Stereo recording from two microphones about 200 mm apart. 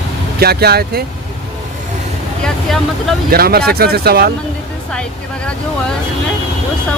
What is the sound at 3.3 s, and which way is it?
Speech, 50° right (ahead or behind).